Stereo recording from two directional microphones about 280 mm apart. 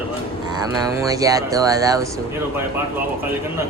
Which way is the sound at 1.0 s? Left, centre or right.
Centre.